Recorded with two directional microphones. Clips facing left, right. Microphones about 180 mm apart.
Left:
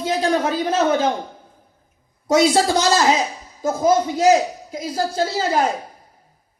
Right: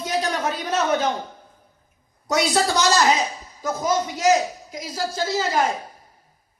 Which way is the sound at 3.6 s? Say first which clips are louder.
Left 6 dB; 30° left (ahead or behind).